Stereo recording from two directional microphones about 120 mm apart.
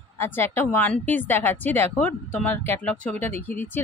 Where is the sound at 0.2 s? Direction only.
20° left (ahead or behind).